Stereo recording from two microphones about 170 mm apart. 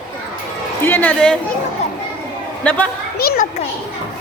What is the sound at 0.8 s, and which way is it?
Speech, 10° left (ahead or behind).